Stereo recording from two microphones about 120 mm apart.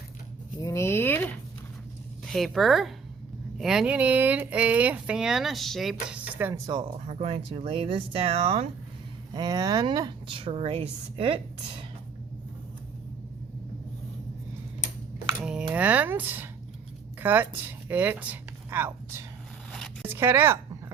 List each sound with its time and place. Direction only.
0.6 s speech: 25° left (ahead or behind)
2.2 s speech: centre (ahead or behind)
6.5 s a woman's voice: 35° right (ahead or behind)
7.1 s speech: 60° right (ahead or behind)
9.3 s a woman's voice: 35° right (ahead or behind); by 11.3 s 50° right (ahead or behind)
15.7 s speech: 15° right (ahead or behind)